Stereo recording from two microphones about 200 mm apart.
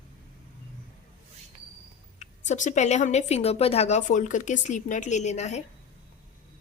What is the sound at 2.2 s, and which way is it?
Speech, 40° left (ahead or behind).